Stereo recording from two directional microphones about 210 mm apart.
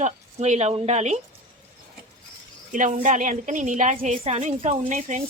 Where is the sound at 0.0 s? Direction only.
35° right (ahead or behind).